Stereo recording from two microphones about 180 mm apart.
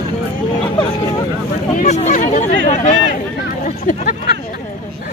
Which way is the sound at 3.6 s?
50° left (ahead or behind).